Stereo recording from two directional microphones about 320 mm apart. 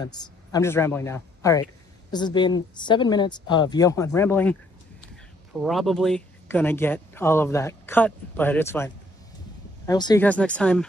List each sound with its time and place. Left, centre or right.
0.0 s speech: centre